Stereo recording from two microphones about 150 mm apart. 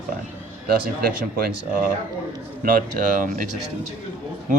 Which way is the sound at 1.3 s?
70° right (ahead or behind).